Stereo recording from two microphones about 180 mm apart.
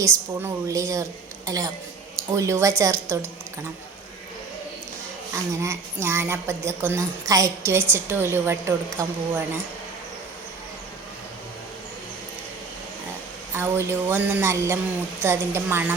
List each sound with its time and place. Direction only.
0.0 s a woman's voice: 15° right (ahead or behind)
5.3 s a woman's voice: 15° right (ahead or behind)
13.5 s a woman's voice: 15° right (ahead or behind)